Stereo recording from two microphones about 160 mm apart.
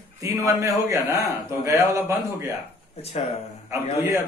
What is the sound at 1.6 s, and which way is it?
Speech, 20° right (ahead or behind).